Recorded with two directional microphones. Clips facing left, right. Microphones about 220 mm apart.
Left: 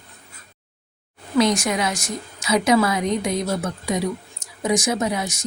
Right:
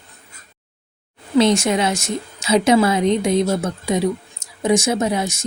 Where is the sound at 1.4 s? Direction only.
25° right (ahead or behind).